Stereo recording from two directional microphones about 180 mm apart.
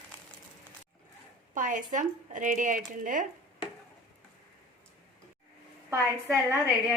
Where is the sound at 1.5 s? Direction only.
45° right (ahead or behind).